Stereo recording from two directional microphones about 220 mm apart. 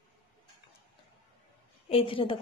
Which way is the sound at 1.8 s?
25° left (ahead or behind).